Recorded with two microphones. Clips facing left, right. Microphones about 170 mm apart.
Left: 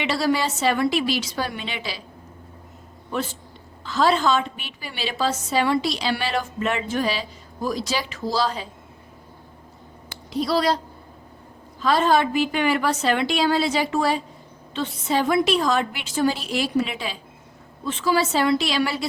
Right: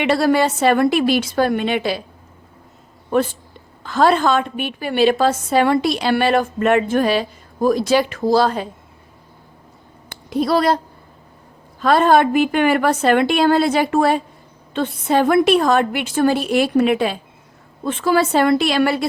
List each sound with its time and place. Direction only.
0.0 s a woman's voice: 55° right (ahead or behind)
3.1 s a woman's voice: 50° right (ahead or behind)
10.1 s a sound: 55° right (ahead or behind)
11.8 s a woman's voice: 55° right (ahead or behind)